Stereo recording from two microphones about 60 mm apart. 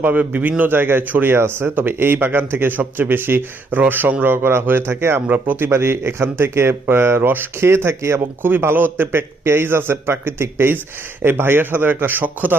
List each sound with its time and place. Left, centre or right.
0.0 s speech: right
8.4 s speech: right